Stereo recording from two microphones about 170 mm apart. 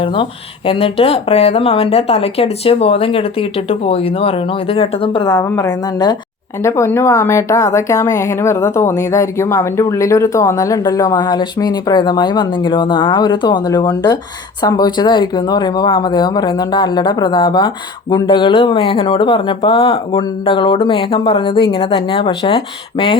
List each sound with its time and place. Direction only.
0.0 s speech: 30° left (ahead or behind)